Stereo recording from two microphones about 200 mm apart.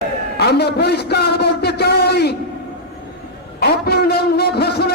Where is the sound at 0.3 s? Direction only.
55° left (ahead or behind).